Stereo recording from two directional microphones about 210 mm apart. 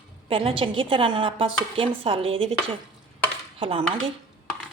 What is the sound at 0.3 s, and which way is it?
A woman's voice, 25° right (ahead or behind).